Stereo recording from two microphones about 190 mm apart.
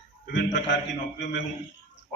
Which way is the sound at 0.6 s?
70° left (ahead or behind).